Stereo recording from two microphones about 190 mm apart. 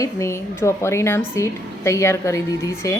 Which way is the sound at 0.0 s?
15° left (ahead or behind).